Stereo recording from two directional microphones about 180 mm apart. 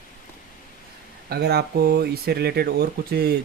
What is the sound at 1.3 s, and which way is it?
Speech, 65° right (ahead or behind).